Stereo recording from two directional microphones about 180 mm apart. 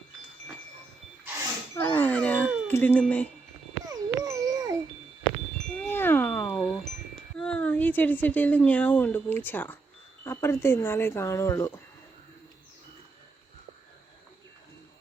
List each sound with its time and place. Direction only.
1.7 s a sound: 10° left (ahead or behind)
2.6 s speech: 10° left (ahead or behind)
3.8 s babbling: 20° right (ahead or behind)
5.6 s wind chime: 5° left (ahead or behind)
6.6 s wind chime: centre (ahead or behind)
7.3 s a woman's voice: 5° left (ahead or behind)